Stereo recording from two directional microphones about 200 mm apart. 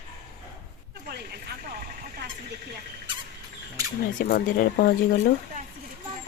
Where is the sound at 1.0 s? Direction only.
50° right (ahead or behind).